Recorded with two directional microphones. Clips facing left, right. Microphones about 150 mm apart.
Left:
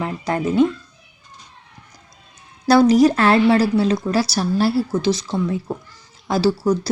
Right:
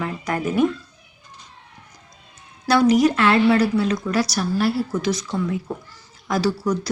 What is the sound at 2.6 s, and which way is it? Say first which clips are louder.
A woman's voice: left 3 dB; 35° left (ahead or behind).